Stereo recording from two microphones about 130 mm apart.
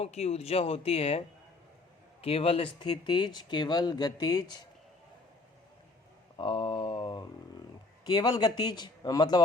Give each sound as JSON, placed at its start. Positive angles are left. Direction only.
{"t": 0.0, "sound": "speech", "side_deg": 55}
{"t": 2.2, "sound": "speech", "side_deg": 50}
{"t": 6.3, "sound": "speech", "side_deg": 35}